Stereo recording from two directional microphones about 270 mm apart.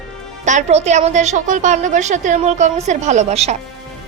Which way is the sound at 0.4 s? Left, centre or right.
Right.